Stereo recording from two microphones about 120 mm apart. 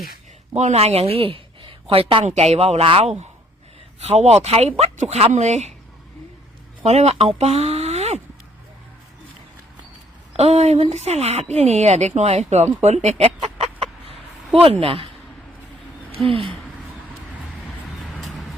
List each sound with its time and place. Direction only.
0.5 s speech: 70° right (ahead or behind); by 2.2 s 50° right (ahead or behind)
2.2 s speech: 65° right (ahead or behind)
6.8 s speech: 60° right (ahead or behind)
10.3 s speech: 60° right (ahead or behind)
12.8 s chicken: 70° right (ahead or behind); by 15.1 s 50° right (ahead or behind)
16.1 s speech: 50° right (ahead or behind)
18.0 s vehicle: centre (ahead or behind)